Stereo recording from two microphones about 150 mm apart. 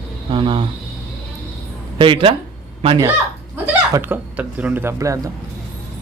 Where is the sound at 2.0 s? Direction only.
35° right (ahead or behind).